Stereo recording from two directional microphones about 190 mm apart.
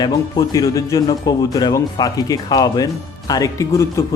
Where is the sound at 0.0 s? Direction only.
20° left (ahead or behind).